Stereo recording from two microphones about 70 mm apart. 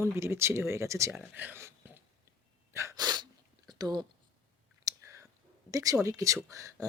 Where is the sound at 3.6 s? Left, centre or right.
Right.